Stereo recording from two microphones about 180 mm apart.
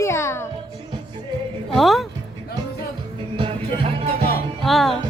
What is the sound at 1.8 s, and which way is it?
Speech, centre (ahead or behind).